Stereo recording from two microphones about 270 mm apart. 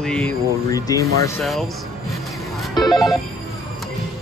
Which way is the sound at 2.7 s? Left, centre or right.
Centre.